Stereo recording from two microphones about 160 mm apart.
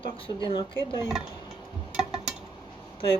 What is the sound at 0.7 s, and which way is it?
Speech, 25° right (ahead or behind).